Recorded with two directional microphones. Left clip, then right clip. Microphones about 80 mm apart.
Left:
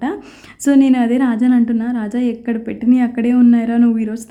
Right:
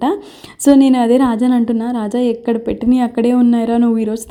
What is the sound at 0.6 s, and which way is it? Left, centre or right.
A woman's voice, right.